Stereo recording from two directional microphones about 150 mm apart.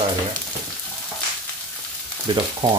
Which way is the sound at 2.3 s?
30° right (ahead or behind).